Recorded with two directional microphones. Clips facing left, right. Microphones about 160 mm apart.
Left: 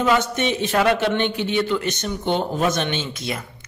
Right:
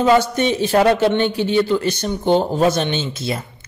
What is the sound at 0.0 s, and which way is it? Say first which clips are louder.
A man's voice: right 5 dB; 35° right (ahead or behind).